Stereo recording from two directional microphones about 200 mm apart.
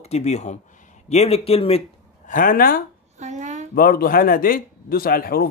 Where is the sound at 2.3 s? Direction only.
45° left (ahead or behind).